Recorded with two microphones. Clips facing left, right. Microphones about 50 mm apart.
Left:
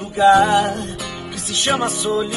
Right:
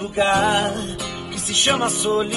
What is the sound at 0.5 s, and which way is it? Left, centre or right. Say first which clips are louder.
Music: left 4 dB; right.